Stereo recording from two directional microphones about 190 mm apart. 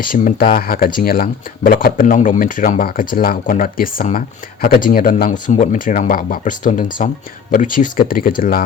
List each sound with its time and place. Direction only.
0.0 s speech: 45° left (ahead or behind)